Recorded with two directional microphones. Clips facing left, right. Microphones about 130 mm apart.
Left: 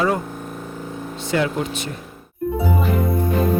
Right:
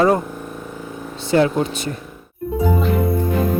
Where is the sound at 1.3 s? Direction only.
35° right (ahead or behind).